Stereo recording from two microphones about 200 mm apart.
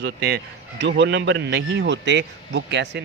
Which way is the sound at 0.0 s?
55° right (ahead or behind).